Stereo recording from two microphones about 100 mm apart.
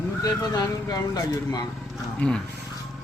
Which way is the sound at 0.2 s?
40° left (ahead or behind).